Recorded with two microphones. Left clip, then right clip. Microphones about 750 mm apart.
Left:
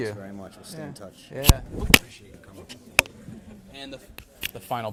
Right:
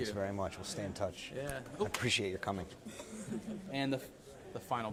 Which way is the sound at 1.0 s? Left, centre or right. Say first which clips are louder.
Right 5 dB; right.